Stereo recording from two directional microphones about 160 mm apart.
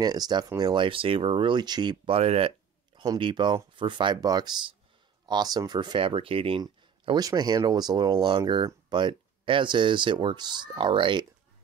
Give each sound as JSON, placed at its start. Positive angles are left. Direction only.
{"t": 0.0, "sound": "speech", "side_deg": -25}